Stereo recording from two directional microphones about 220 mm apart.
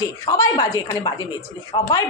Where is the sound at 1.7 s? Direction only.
25° left (ahead or behind).